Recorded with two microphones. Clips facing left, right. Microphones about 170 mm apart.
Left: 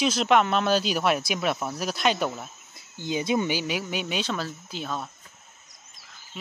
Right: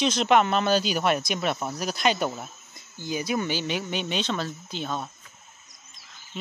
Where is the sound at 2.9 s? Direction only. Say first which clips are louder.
Left 2 dB; 20° left (ahead or behind).